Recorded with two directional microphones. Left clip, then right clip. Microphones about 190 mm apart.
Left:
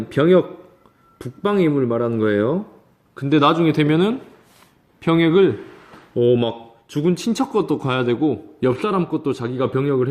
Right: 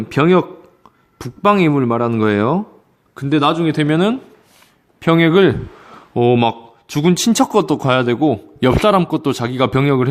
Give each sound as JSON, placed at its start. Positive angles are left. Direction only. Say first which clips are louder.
{"t": 0.1, "sound": "a man's voice", "louder": "right 1 dB", "side_deg": -40}
{"t": 3.2, "sound": "speech", "louder": "right 1 dB", "side_deg": -25}
{"t": 6.1, "sound": "a man's voice", "louder": "right 3 dB", "side_deg": -45}